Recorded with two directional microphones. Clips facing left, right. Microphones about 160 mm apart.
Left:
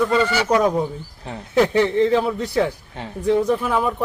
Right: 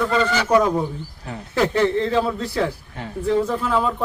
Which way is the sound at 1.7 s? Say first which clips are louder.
Left 2 dB; 15° left (ahead or behind).